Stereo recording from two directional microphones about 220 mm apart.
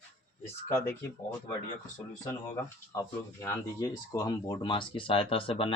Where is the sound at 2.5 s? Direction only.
10° left (ahead or behind).